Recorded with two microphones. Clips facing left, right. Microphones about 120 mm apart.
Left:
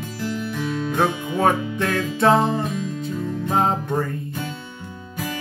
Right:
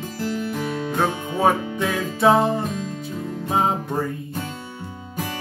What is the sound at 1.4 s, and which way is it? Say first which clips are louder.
Music: even; 5° right (ahead or behind).